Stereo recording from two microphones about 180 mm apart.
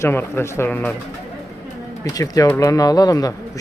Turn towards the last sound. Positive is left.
turn(degrees=20)  # may be behind; listen again after turning